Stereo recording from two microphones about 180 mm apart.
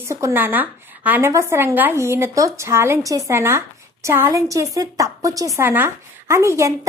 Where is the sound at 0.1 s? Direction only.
15° right (ahead or behind).